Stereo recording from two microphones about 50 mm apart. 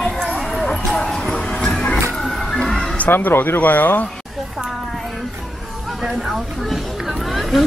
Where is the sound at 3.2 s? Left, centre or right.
Left.